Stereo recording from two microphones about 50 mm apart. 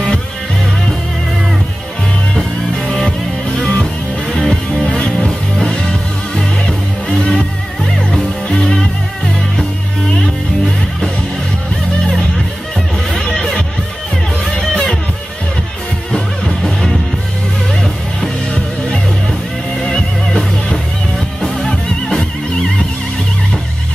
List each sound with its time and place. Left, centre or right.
2.3 s music: centre
8.5 s music: centre
13.1 s music: centre
16.1 s music: centre
19.8 s music: centre
21.6 s music: centre